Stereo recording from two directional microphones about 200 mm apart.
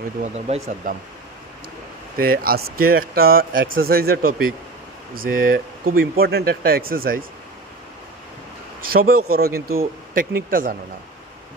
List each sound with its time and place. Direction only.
0.2 s speech: 35° right (ahead or behind)
2.1 s speech: 45° right (ahead or behind)
8.8 s speech: 45° right (ahead or behind)